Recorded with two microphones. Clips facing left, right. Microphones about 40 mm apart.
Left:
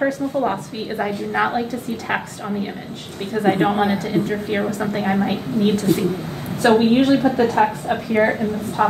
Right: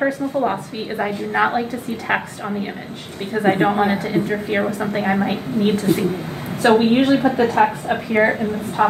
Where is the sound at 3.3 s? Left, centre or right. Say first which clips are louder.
Right 1 dB; centre.